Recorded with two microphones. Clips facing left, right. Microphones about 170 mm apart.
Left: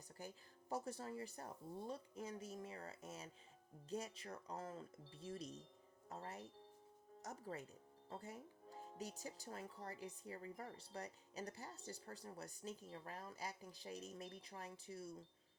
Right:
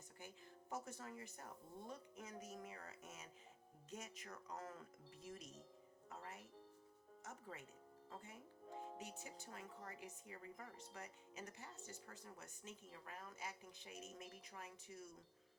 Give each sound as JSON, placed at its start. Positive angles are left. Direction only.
{"t": 0.2, "sound": "speech", "side_deg": 35}